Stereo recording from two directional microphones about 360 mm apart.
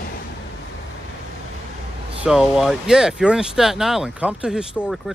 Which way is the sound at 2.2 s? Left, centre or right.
Centre.